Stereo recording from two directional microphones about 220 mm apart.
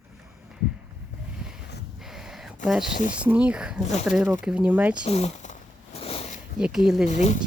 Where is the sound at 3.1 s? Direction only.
5° right (ahead or behind).